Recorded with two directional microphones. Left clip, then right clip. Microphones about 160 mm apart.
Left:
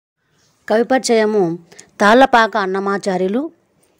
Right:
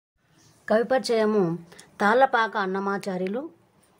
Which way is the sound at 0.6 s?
50° left (ahead or behind).